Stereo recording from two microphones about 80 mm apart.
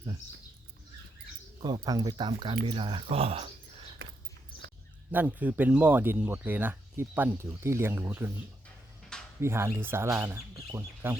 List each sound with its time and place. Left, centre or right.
1.6 s speech: right
2.0 s speech: right
5.1 s speech: right
7.3 s speech: right
9.4 s speech: right